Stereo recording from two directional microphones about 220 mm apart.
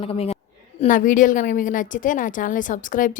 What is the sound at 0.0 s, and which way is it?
A woman's voice, 25° left (ahead or behind).